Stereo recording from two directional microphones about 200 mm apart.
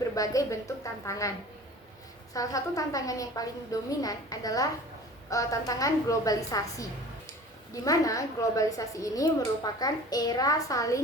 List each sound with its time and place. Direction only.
0.2 s a woman's voice: 15° left (ahead or behind)
2.3 s a woman's voice: 15° left (ahead or behind)